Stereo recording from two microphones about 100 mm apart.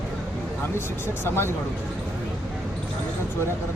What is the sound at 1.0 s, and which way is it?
Speech, 25° left (ahead or behind).